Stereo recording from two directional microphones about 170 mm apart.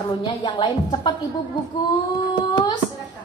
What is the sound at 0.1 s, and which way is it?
Speech, 25° left (ahead or behind).